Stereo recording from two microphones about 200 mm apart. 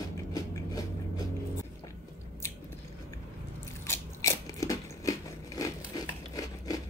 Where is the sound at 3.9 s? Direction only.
15° left (ahead or behind).